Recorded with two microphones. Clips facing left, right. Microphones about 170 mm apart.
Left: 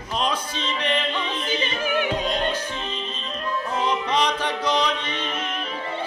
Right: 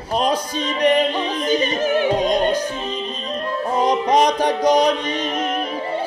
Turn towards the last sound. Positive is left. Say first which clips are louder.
# right 8 dB
turn(degrees=-40)  # may be behind; listen again after turning